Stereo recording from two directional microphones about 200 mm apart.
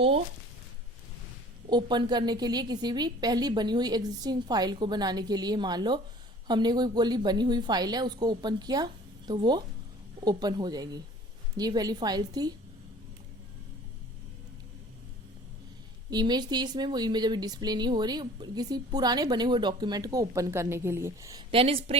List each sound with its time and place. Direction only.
1.7 s speech: 20° right (ahead or behind)
16.0 s speech: 20° right (ahead or behind)
21.5 s speech: 30° right (ahead or behind)